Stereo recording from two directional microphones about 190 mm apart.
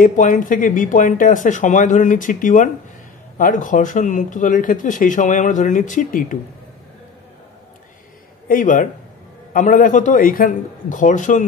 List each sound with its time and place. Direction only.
0.0 s speech: 45° left (ahead or behind)
8.5 s speech: 45° left (ahead or behind)